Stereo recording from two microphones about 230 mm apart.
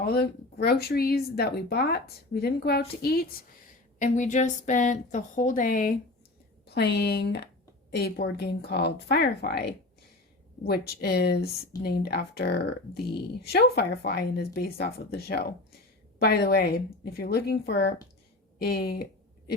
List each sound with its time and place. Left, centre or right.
0.1 s a woman's voice: left